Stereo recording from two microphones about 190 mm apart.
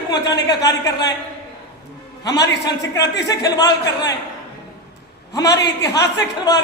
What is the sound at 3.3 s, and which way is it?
Speech, 20° left (ahead or behind).